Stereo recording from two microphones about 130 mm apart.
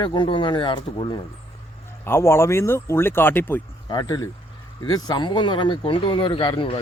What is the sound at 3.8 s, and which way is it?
Speech, 30° left (ahead or behind).